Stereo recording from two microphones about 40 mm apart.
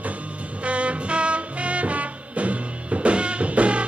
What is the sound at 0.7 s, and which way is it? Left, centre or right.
Music, right.